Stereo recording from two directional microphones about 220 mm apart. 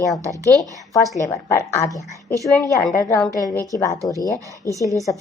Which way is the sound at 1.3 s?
10° left (ahead or behind).